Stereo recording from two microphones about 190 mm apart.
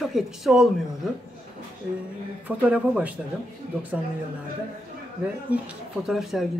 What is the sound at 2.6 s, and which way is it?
Speech, 5° right (ahead or behind).